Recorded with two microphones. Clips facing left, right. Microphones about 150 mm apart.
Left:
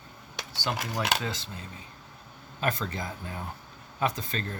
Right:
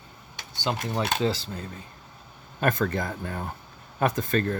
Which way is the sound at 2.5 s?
55° right (ahead or behind).